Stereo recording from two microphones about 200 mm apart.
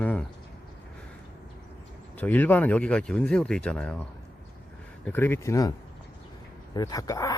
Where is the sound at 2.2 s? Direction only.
10° left (ahead or behind).